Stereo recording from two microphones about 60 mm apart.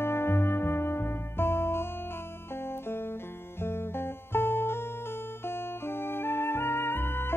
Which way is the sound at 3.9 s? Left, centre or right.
Left.